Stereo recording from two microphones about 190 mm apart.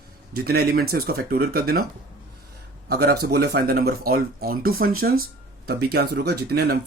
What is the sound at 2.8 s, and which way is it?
Speech, 55° right (ahead or behind).